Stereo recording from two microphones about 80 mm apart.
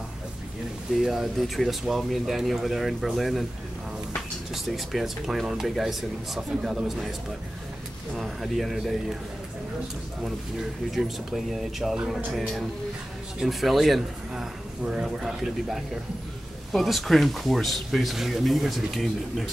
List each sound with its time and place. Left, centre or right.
0.9 s speech: centre
4.6 s speech: centre
10.2 s speech: centre